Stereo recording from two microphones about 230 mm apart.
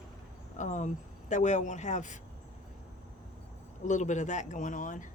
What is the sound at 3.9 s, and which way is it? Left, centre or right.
Speech, left.